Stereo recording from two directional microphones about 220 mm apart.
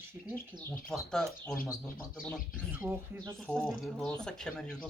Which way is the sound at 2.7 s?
10° right (ahead or behind).